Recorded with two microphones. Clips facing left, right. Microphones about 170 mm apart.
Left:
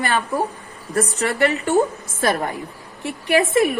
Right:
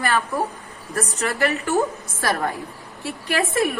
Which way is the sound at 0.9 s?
35° left (ahead or behind).